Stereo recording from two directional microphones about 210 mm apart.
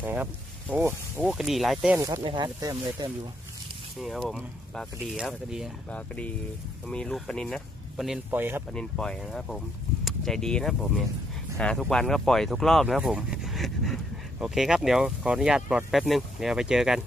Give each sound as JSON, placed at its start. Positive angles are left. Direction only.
{"t": 0.0, "sound": "speech", "side_deg": -10}
{"t": 2.0, "sound": "speech", "side_deg": -15}
{"t": 4.0, "sound": "speech", "side_deg": 0}
{"t": 8.7, "sound": "speech", "side_deg": 5}